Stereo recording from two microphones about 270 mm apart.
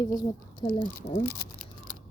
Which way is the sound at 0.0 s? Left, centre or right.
Centre.